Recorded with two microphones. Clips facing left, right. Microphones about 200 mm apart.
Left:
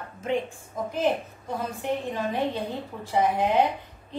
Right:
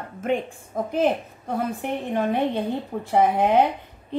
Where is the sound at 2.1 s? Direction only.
55° right (ahead or behind).